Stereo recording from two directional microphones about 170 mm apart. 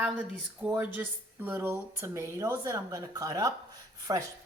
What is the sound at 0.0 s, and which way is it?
Speech, 5° right (ahead or behind).